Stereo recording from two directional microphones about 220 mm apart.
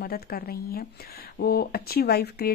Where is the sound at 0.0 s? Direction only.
45° left (ahead or behind).